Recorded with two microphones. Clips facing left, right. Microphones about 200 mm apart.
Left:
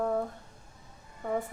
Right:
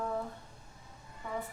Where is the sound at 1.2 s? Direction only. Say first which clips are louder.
Left 8 dB; 50° left (ahead or behind).